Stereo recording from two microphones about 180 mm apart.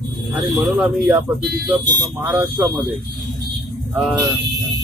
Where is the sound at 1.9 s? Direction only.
20° right (ahead or behind).